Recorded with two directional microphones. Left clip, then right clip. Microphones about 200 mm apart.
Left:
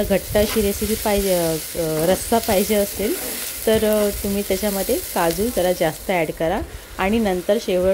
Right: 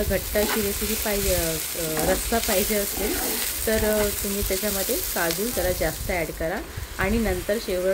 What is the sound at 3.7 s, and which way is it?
Frying, 35° left (ahead or behind).